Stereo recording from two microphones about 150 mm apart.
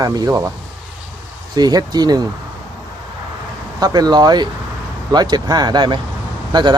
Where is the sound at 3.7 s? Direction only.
25° right (ahead or behind).